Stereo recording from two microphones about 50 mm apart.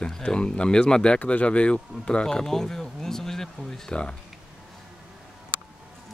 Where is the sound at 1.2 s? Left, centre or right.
Left.